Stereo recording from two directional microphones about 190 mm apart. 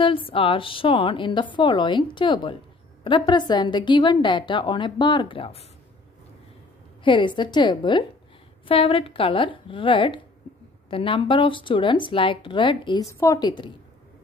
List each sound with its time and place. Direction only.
0.3 s speech: 30° left (ahead or behind)
7.0 s speech: 25° left (ahead or behind)